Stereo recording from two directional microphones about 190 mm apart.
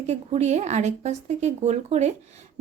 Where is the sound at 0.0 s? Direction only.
35° right (ahead or behind).